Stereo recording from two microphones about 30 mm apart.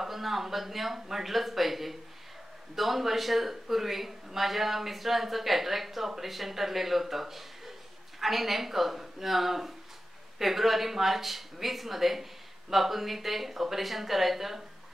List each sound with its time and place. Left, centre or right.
0.0 s speech: centre